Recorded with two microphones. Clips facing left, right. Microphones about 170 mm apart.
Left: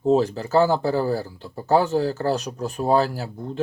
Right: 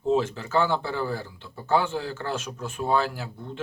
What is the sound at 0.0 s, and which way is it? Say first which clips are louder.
Speech: left 5 dB; 40° left (ahead or behind).